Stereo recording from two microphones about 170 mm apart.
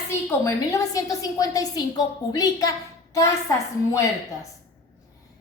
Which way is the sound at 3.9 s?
20° left (ahead or behind).